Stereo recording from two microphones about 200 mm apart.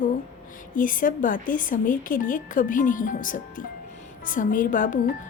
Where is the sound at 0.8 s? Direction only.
40° left (ahead or behind).